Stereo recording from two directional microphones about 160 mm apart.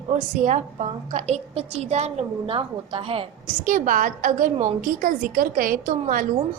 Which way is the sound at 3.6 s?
55° right (ahead or behind).